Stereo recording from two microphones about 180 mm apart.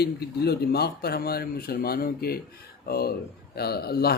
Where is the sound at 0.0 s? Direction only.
60° left (ahead or behind).